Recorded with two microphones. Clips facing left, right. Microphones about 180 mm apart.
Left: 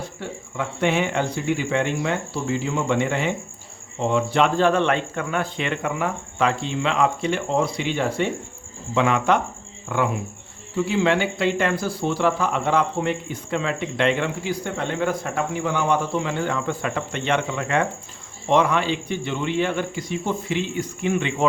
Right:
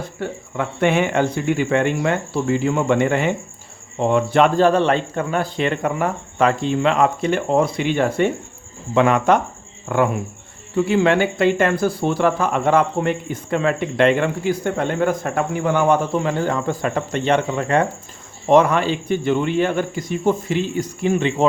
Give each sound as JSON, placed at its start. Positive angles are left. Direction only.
{"t": 0.2, "sound": "speech", "side_deg": -55}